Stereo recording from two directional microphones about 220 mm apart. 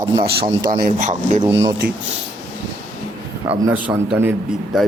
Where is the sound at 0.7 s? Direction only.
35° right (ahead or behind).